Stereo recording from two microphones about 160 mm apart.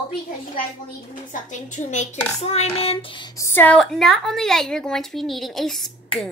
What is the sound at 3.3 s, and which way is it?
A woman's voice, 10° left (ahead or behind).